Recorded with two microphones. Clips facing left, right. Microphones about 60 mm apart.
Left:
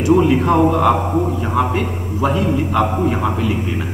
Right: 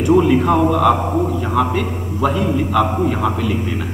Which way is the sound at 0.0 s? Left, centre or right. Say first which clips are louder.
Even; centre.